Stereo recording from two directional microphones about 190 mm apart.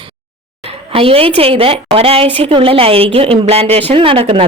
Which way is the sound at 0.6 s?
30° right (ahead or behind).